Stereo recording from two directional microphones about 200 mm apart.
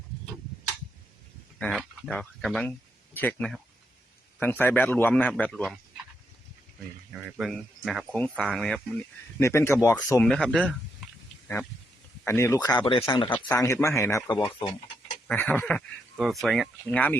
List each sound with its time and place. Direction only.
1.5 s speech: 5° left (ahead or behind)
7.3 s speech: centre (ahead or behind)
9.4 s speech: 15° left (ahead or behind)
10.2 s speech: 5° left (ahead or behind)
12.2 s speech: 15° left (ahead or behind)
15.3 s speech: 10° left (ahead or behind)